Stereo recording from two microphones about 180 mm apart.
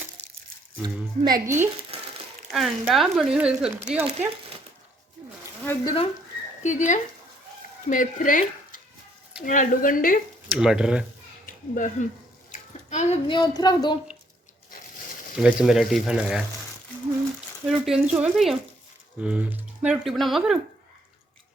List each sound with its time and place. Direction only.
0.8 s speech: 25° right (ahead or behind)
1.9 s crumpling: 35° right (ahead or behind)
2.5 s speech: centre (ahead or behind)
5.8 s speech: 25° left (ahead or behind)
6.6 s speech: 45° left (ahead or behind)
10.6 s speech: 5° right (ahead or behind)
11.4 s speech: 50° left (ahead or behind)
12.5 s bathtub: 40° left (ahead or behind)
13.2 s speech: 25° left (ahead or behind)
15.4 s speech: 5° right (ahead or behind)
17.7 s speech: 5° right (ahead or behind)